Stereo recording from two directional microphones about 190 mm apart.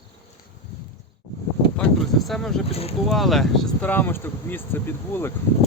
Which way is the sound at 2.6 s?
30° left (ahead or behind).